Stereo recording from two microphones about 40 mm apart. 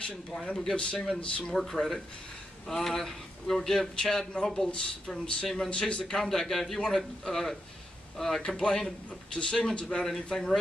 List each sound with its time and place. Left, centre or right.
0.5 s speech: centre
0.9 s speech: centre; by 6.1 s left
6.1 s speech: centre